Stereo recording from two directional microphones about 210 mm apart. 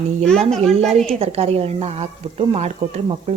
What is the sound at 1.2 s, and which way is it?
Speech, 30° right (ahead or behind).